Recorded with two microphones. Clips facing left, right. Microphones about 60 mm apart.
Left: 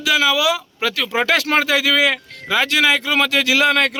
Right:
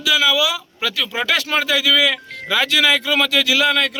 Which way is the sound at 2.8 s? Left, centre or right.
Left.